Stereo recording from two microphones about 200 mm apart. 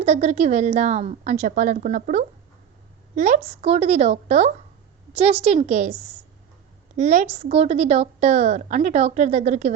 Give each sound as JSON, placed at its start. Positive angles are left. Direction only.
{"t": 0.0, "sound": "a woman's voice", "side_deg": -30}
{"t": 6.9, "sound": "a woman's voice", "side_deg": -35}